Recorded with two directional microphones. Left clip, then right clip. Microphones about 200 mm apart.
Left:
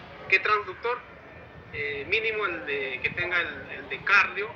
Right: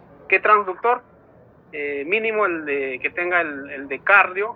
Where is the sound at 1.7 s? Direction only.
25° right (ahead or behind).